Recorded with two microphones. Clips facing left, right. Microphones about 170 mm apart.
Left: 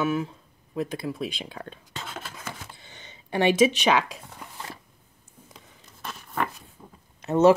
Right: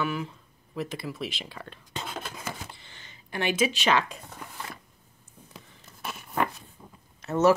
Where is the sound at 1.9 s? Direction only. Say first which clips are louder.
Right 5 dB; 15° right (ahead or behind).